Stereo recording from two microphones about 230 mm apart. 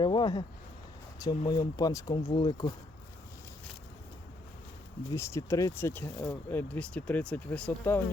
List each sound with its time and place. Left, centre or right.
0.0 s speech: centre
5.1 s speech: centre